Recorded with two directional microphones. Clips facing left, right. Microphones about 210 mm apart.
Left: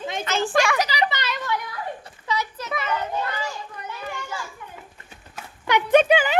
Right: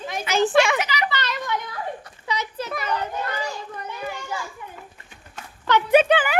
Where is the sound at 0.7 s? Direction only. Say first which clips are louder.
Left 2 dB; 35° left (ahead or behind).